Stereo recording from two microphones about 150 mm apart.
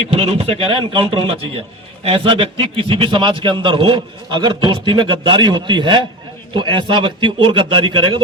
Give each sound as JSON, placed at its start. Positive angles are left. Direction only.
{"t": 0.1, "sound": "a man's voice", "side_deg": -40}